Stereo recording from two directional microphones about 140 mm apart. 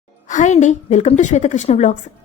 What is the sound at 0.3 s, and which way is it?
A woman's voice, 60° left (ahead or behind).